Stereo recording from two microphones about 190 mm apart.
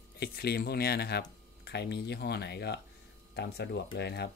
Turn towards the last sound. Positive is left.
turn(degrees=60)  # may be behind; listen again after turning